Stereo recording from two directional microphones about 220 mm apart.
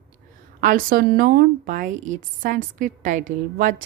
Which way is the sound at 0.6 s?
40° right (ahead or behind).